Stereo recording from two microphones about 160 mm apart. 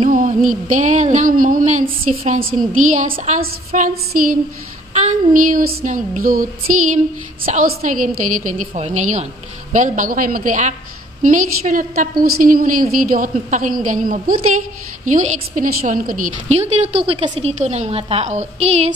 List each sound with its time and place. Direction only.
0.1 s a woman's voice: 55° right (ahead or behind)
7.5 s a woman's voice: 55° right (ahead or behind)
8.7 s a woman's voice: 45° right (ahead or behind)